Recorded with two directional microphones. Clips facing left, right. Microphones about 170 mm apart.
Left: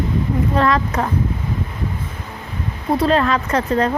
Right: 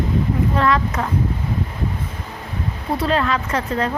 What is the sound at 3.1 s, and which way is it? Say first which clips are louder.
Speech: left 2 dB; 40° left (ahead or behind).